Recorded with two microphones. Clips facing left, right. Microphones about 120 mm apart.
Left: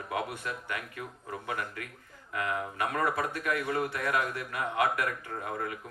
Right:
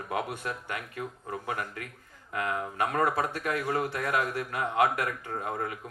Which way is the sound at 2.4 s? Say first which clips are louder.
Right 2 dB; 30° right (ahead or behind).